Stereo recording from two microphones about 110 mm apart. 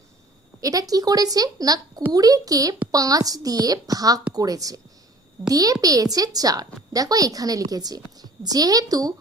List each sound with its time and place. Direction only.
0.6 s a woman's voice: 35° right (ahead or behind)